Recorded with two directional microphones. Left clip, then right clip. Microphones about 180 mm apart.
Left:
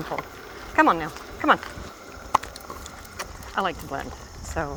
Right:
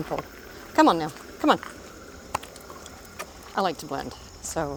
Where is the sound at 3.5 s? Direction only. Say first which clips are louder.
Even; 40° right (ahead or behind).